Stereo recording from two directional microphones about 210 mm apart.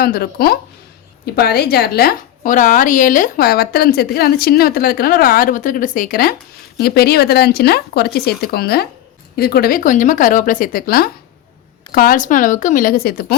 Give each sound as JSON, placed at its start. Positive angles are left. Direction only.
{"t": 0.0, "sound": "a woman's voice", "side_deg": 45}